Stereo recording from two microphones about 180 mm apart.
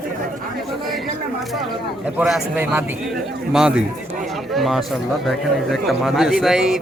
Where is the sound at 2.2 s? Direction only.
5° right (ahead or behind).